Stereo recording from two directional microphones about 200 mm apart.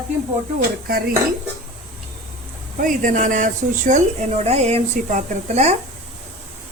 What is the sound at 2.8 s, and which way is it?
Speech, 40° right (ahead or behind).